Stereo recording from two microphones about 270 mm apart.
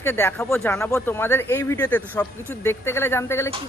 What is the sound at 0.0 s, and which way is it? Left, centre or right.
Speech, centre.